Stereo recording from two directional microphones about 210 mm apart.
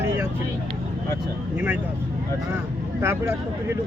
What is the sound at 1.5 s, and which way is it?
Speech, 10° right (ahead or behind).